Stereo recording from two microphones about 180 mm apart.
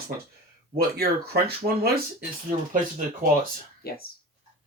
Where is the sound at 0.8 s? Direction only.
60° right (ahead or behind).